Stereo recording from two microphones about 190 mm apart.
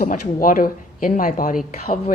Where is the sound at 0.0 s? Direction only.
45° left (ahead or behind).